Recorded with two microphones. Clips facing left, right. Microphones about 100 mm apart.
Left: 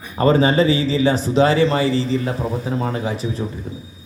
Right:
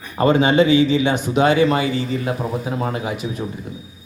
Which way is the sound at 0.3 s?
35° left (ahead or behind).